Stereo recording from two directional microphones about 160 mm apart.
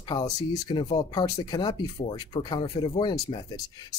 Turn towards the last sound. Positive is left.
turn(degrees=25)  # may be behind; listen again after turning